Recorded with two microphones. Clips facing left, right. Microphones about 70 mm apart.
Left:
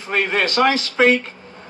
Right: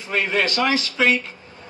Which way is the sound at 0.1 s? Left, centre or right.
Left.